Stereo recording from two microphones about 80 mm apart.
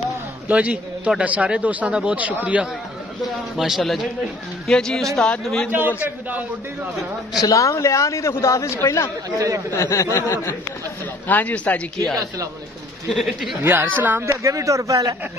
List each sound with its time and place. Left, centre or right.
0.5 s a man's voice: centre
3.5 s a man's voice: centre
5.7 s a man's voice: right
7.3 s a man's voice: left
11.2 s a man's voice: centre
13.6 s a man's voice: right
14.2 s speech: right